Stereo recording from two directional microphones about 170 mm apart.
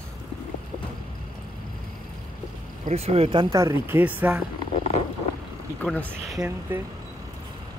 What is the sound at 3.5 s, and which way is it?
Speech, 15° right (ahead or behind).